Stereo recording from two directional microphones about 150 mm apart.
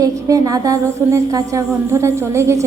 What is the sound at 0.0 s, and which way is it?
A woman's voice, 25° right (ahead or behind).